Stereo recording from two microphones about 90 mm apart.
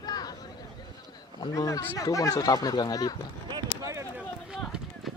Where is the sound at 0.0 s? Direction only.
45° left (ahead or behind).